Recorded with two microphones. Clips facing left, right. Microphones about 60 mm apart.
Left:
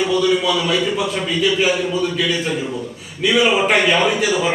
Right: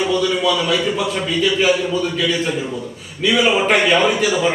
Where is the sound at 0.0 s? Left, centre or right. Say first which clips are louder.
Left 1 dB; centre.